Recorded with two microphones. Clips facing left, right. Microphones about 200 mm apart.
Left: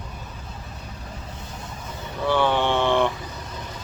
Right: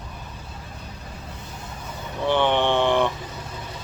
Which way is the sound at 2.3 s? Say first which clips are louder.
Right 1 dB; 20° right (ahead or behind).